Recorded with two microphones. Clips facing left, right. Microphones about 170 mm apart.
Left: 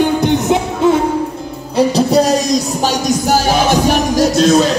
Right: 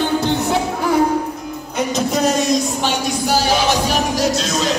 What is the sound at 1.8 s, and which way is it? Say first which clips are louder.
Music: left 7 dB; 35° left (ahead or behind).